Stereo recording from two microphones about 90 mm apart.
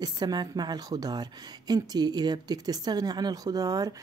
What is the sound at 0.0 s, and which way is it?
A woman's voice, 50° right (ahead or behind).